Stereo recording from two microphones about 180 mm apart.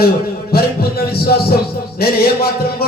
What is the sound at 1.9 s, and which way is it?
Music, 60° left (ahead or behind).